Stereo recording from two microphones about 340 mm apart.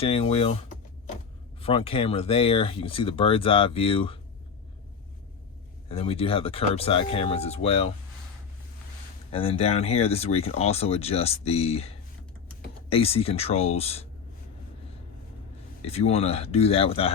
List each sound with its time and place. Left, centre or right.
0.0 s speech: centre
1.6 s speech: centre
5.9 s speech: centre
9.3 s speech: centre
15.8 s speech: centre